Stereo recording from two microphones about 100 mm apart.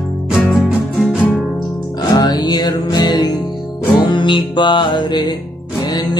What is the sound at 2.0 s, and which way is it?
Music, 40° left (ahead or behind).